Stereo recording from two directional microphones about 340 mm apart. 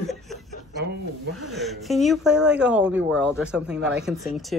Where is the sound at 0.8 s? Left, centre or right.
Right.